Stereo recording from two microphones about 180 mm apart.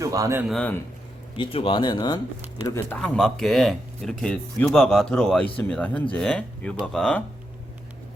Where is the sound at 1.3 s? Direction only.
30° left (ahead or behind).